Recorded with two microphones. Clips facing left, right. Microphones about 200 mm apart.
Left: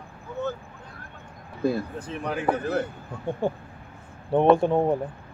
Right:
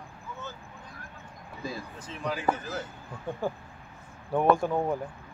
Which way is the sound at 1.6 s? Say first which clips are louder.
Left 12 dB; 60° left (ahead or behind).